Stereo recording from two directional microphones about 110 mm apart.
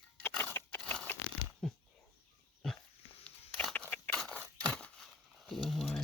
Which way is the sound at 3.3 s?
10° left (ahead or behind).